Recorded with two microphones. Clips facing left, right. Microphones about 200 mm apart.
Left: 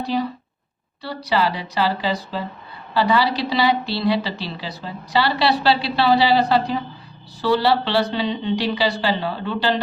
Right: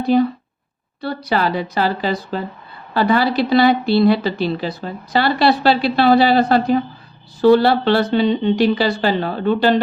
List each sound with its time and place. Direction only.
0.0 s speech: 55° right (ahead or behind)